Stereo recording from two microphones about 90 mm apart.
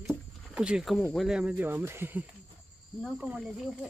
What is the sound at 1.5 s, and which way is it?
Speech, 25° right (ahead or behind).